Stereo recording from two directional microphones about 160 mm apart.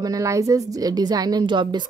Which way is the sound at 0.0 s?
20° right (ahead or behind).